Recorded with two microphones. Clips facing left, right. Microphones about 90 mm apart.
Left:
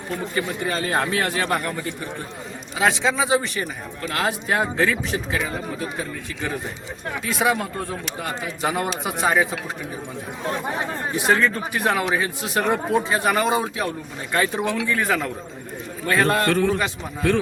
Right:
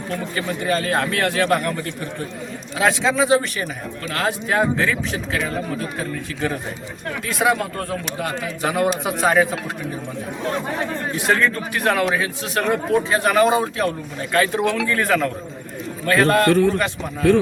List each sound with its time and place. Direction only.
0.1 s a man's voice: 15° left (ahead or behind)
2.7 s a man's voice: 5° left (ahead or behind)
7.3 s speech: centre (ahead or behind)
10.7 s a man's voice: 20° left (ahead or behind)
11.2 s a man's voice: 5° left (ahead or behind)